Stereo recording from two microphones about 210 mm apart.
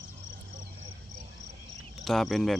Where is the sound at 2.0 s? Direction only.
Centre (ahead or behind).